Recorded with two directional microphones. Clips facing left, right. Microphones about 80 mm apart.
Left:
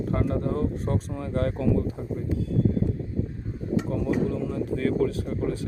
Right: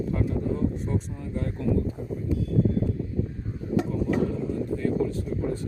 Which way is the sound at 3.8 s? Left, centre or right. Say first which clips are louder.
Even; left.